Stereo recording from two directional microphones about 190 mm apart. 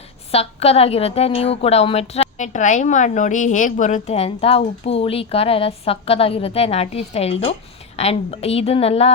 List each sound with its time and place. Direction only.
0.3 s a woman's voice: 30° left (ahead or behind)